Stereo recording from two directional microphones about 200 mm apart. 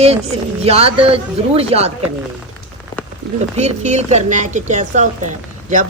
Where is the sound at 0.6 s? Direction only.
30° right (ahead or behind).